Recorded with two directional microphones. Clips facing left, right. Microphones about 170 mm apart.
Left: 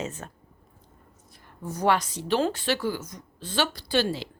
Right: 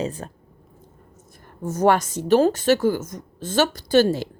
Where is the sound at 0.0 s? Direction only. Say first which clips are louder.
Right 6 dB; 35° right (ahead or behind).